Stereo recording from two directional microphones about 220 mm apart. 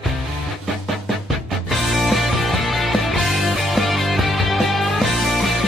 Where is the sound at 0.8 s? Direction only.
Centre (ahead or behind).